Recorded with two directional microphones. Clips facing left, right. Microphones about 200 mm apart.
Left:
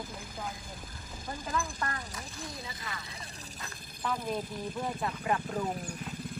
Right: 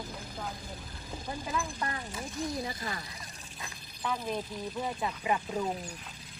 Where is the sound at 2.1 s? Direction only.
25° right (ahead or behind).